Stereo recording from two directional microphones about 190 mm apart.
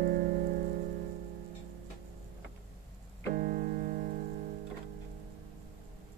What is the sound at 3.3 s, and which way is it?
Keyboard, 50° right (ahead or behind).